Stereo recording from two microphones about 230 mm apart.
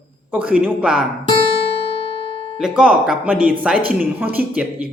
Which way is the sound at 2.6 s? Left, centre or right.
Centre.